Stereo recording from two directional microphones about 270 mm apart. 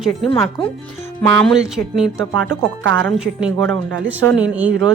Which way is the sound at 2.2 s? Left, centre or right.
Right.